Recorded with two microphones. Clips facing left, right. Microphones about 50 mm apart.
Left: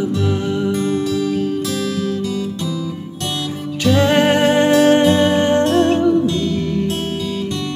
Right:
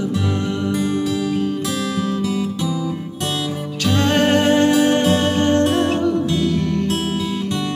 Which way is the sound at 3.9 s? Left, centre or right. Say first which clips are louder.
Left 2 dB; centre.